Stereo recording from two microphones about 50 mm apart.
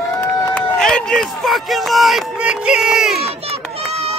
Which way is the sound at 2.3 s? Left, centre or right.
Centre.